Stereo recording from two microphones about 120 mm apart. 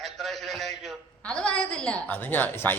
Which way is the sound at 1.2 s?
10° left (ahead or behind).